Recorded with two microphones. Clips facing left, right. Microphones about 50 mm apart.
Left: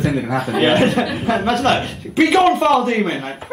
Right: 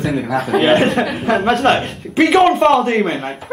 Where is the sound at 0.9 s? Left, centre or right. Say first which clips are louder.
Right 1 dB; right.